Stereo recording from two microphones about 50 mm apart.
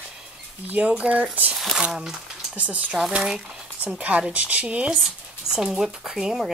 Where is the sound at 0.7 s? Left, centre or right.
Right.